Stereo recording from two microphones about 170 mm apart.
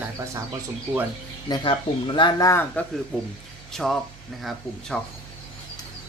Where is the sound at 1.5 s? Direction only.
30° left (ahead or behind); by 2.8 s 15° left (ahead or behind).